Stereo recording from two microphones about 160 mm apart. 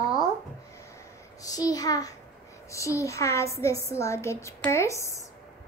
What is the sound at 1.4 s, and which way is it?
A woman's voice, 25° left (ahead or behind).